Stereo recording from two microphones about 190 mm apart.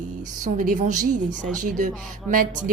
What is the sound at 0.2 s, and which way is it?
A woman's voice, 45° right (ahead or behind).